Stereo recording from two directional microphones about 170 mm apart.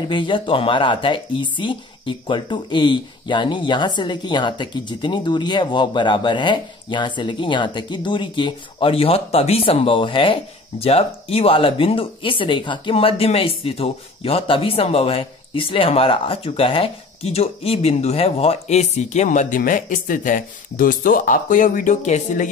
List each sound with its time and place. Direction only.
0.1 s speech: 30° left (ahead or behind); by 22.5 s 45° left (ahead or behind)